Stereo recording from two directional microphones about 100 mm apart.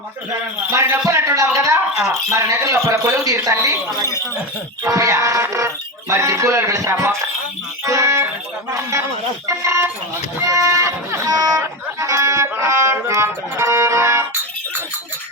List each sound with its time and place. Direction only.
0.7 s speech: 25° right (ahead or behind)
7.9 s music: 30° right (ahead or behind)
8.7 s speech: 30° right (ahead or behind)
10.4 s music: 35° right (ahead or behind)